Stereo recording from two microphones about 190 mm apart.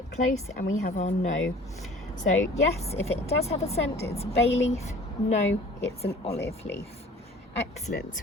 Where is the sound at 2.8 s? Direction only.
35° left (ahead or behind).